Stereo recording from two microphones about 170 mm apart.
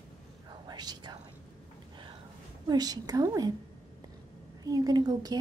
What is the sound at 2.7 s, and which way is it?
Speech, 25° right (ahead or behind).